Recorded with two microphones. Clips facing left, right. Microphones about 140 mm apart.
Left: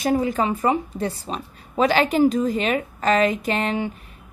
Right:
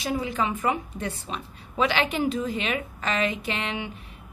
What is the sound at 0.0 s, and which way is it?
A woman's voice, 45° left (ahead or behind).